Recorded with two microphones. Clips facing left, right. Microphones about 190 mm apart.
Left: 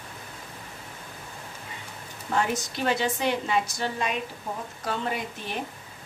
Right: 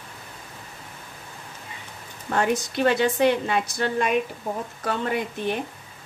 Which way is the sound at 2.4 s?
60° right (ahead or behind).